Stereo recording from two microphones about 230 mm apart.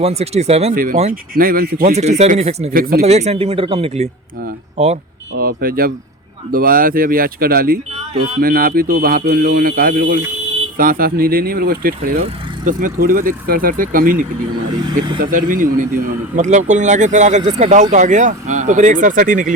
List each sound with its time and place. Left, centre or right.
0.0 s speech: right
2.0 s speech: right
5.3 s speech: right
14.8 s speech: centre
15.2 s speech: right